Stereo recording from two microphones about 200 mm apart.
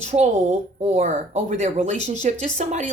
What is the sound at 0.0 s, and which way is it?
Speech, 35° right (ahead or behind).